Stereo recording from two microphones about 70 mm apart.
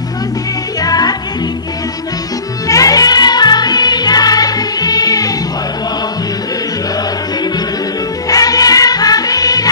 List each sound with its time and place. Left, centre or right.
0.8 s music: left
2.7 s music: left
8.3 s music: left